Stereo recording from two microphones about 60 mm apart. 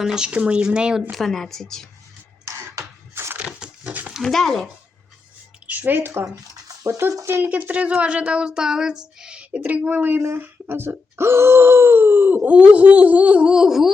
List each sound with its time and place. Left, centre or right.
0.0 s speech: centre
1.1 s a woman's voice: centre
2.4 s a sound: right
3.4 s a sound: centre
4.2 s a woman's voice: centre
5.6 s speech: right
7.6 s speech: right
10.2 s speech: right
12.4 s speech: right; by 13.9 s centre